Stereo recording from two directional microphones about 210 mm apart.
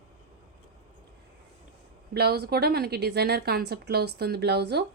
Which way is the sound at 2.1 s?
50° right (ahead or behind).